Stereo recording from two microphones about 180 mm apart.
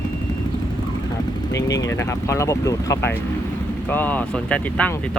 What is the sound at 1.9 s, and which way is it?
Speech, 15° left (ahead or behind).